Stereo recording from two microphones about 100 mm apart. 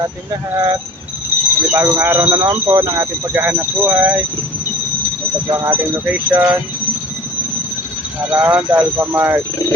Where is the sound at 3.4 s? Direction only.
20° right (ahead or behind).